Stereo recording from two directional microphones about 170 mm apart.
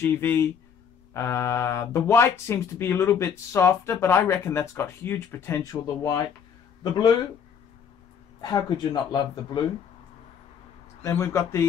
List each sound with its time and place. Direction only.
0.0 s speech: 15° left (ahead or behind)
8.4 s speech: 25° left (ahead or behind)
11.0 s speech: 15° left (ahead or behind)